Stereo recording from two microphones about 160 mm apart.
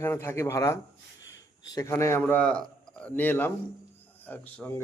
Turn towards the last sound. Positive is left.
turn(degrees=10)  # may be behind; listen again after turning